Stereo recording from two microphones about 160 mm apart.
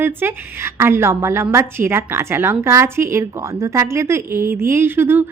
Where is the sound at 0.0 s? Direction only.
15° right (ahead or behind).